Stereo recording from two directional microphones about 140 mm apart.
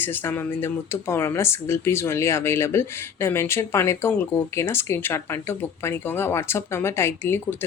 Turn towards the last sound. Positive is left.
turn(degrees=15)  # may be behind; listen again after turning